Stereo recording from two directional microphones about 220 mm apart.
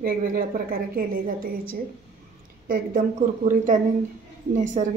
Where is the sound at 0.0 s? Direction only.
40° right (ahead or behind).